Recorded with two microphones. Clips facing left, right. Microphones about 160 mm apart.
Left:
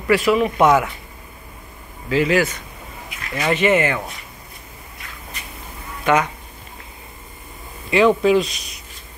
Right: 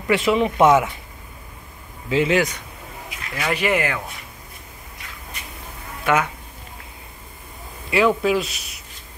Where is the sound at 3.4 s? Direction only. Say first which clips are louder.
Left 4 dB; 5° right (ahead or behind).